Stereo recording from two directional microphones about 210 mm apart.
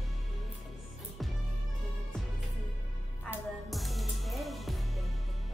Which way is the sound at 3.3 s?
Centre (ahead or behind).